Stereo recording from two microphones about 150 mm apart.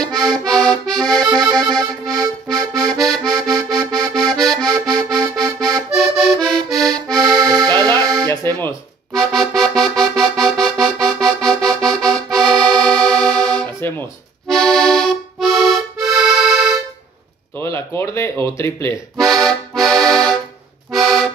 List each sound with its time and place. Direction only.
0.0 s accordion: centre (ahead or behind)
2.8 s accordion: 5° left (ahead or behind)
7.2 s accordion: 25° right (ahead or behind)
8.0 s music: 25° right (ahead or behind)
8.5 s music: 15° left (ahead or behind)
9.1 s music: 5° left (ahead or behind)
14.5 s accordion: 5° left (ahead or behind)
17.6 s a sound: 15° left (ahead or behind)
19.1 s accordion: centre (ahead or behind)